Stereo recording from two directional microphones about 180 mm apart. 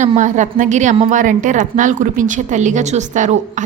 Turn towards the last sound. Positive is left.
turn(degrees=-45)  # may be behind; listen again after turning